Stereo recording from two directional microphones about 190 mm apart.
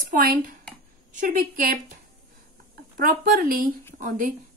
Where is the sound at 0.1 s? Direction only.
50° right (ahead or behind).